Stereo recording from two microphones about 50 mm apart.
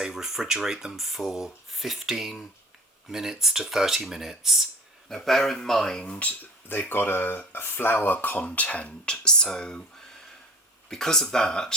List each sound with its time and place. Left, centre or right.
0.0 s speech: centre
5.0 s speech: centre
6.1 s speech: left
6.7 s speech: left; by 9.8 s centre
10.8 s speech: centre